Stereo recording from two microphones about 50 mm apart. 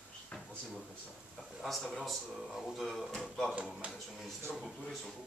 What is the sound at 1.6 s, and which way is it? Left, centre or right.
Speech, centre.